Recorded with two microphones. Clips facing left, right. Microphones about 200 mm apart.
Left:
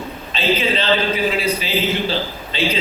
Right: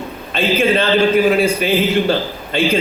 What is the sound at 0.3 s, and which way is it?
A man's voice, 50° right (ahead or behind).